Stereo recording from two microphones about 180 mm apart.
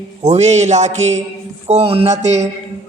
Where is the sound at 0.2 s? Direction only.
35° right (ahead or behind).